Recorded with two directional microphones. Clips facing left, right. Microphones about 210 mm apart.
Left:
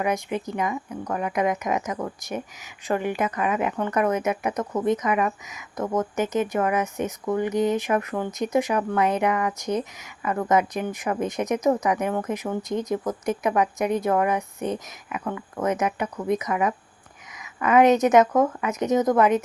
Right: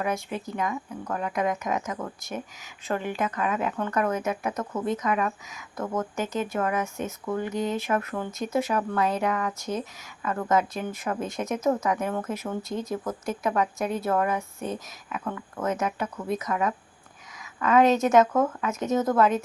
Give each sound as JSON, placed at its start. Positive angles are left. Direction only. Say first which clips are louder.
{"t": 0.0, "sound": "speech", "louder": "left 4 dB", "side_deg": 15}